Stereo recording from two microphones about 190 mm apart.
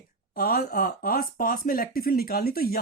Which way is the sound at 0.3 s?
50° left (ahead or behind).